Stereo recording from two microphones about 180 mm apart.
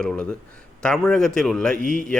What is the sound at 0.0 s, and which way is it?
A man's voice, 5° left (ahead or behind).